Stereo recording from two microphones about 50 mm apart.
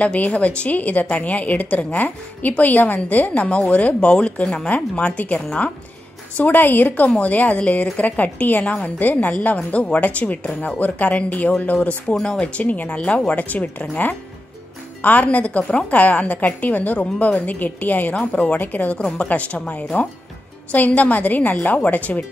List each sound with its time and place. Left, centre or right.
0.0 s a woman's voice: left
12.1 s a woman's voice: centre
20.7 s a woman's voice: left